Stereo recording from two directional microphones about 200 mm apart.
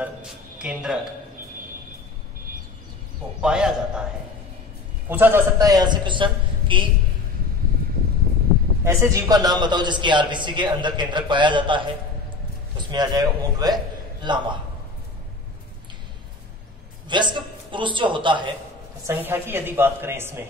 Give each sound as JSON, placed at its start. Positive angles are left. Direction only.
{"t": 0.0, "sound": "speech", "side_deg": -5}
{"t": 3.3, "sound": "speech", "side_deg": -5}
{"t": 5.0, "sound": "a man's voice", "side_deg": -10}
{"t": 8.8, "sound": "a man's voice", "side_deg": -15}
{"t": 17.1, "sound": "a man's voice", "side_deg": -25}
{"t": 19.0, "sound": "a woman's voice", "side_deg": -10}